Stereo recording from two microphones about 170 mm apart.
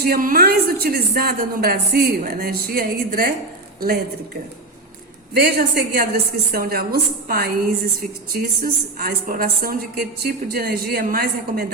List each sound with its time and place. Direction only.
0.0 s a woman's voice: 55° right (ahead or behind)
5.3 s a woman's voice: 65° right (ahead or behind)